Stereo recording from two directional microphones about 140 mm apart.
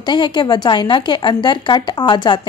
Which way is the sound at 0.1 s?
30° left (ahead or behind).